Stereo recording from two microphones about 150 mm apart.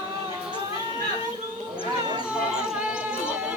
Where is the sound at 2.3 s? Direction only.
5° right (ahead or behind).